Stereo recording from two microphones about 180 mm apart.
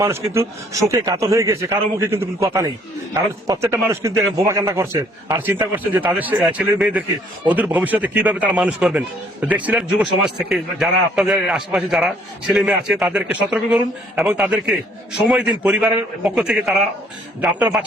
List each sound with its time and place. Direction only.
0.0 s a man's voice: 15° right (ahead or behind)